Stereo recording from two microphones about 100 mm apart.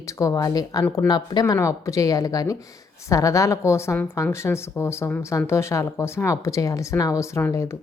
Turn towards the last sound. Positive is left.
turn(degrees=25)  # may be behind; listen again after turning